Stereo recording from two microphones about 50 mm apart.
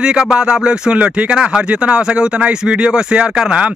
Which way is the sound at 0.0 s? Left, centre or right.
Centre.